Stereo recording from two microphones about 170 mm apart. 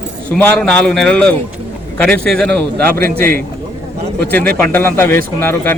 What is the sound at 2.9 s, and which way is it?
Speech, 60° right (ahead or behind).